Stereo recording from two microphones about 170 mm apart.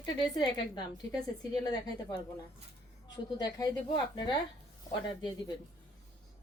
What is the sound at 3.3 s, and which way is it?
A woman's voice, 25° left (ahead or behind).